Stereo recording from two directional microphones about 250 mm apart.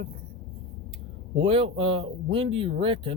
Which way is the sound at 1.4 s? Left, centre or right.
Right.